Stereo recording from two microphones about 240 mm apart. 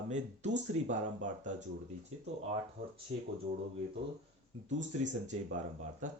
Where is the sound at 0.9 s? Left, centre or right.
Right.